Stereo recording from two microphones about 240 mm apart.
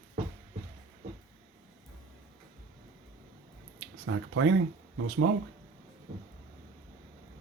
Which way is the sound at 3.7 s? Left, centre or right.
Right.